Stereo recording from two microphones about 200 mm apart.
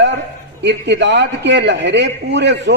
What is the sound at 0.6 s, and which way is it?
A man's voice, 60° right (ahead or behind).